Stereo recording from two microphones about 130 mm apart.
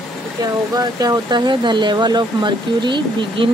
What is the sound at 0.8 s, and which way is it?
Speech, 30° right (ahead or behind).